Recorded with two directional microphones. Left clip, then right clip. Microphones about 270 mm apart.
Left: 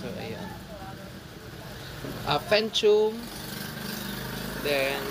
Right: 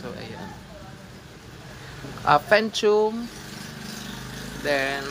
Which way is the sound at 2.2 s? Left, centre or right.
Centre.